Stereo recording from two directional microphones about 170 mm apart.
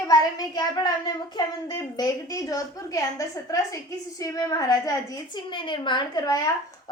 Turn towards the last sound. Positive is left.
turn(degrees=20)  # may be behind; listen again after turning